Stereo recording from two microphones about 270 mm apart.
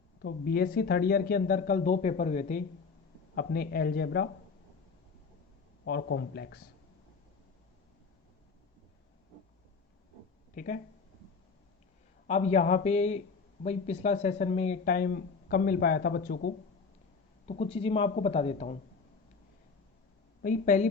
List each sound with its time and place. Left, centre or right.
0.2 s speech: left
5.8 s speech: left
10.5 s speech: left
12.3 s a man's voice: left
17.4 s a man's voice: left
20.4 s a man's voice: left